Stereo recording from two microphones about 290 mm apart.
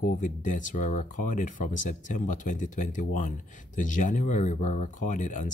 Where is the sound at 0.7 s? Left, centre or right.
Left.